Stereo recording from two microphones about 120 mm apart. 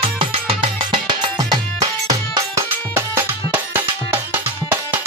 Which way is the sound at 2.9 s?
20° right (ahead or behind).